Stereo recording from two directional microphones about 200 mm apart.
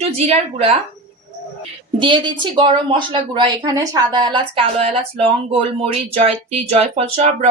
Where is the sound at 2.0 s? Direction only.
25° right (ahead or behind).